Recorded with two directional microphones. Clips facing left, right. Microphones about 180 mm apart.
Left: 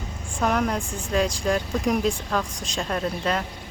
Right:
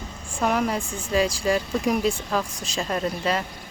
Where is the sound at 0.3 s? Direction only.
5° right (ahead or behind).